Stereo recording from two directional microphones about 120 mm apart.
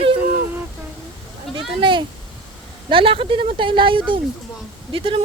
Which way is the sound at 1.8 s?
45° right (ahead or behind).